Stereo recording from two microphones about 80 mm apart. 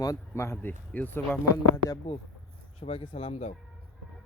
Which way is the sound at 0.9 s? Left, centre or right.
Left.